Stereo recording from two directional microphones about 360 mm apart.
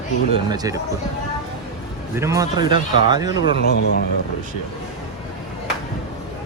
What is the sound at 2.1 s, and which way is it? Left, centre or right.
Speech, centre.